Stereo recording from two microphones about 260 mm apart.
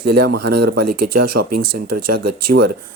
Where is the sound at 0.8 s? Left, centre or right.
Right.